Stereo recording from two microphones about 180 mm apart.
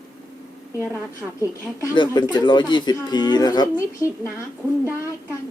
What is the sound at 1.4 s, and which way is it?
Speech, 20° left (ahead or behind).